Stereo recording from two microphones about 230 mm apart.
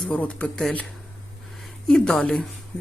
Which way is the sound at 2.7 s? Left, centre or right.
Centre.